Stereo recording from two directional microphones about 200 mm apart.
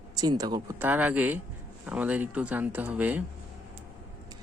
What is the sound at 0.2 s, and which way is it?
Speech, 20° right (ahead or behind).